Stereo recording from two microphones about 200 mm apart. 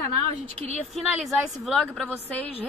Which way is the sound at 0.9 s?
Centre (ahead or behind).